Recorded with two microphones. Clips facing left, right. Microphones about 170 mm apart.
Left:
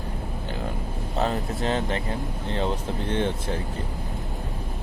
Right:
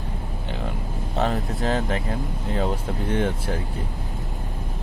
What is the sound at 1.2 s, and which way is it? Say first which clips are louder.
Speech: right 1 dB; centre (ahead or behind).